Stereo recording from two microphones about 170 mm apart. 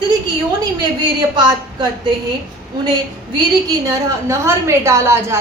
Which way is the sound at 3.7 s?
20° right (ahead or behind).